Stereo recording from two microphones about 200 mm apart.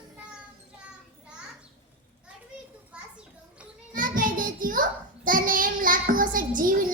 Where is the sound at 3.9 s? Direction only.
40° right (ahead or behind).